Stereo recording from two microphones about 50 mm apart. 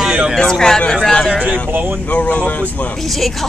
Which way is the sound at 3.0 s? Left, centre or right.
Centre.